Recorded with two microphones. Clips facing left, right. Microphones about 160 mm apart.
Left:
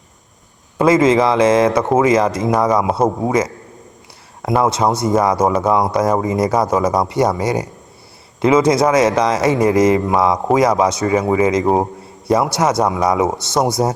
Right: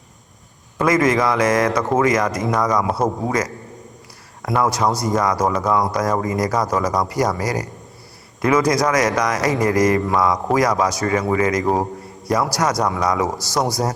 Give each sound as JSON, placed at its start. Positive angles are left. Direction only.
{"t": 0.8, "sound": "speech", "side_deg": 25}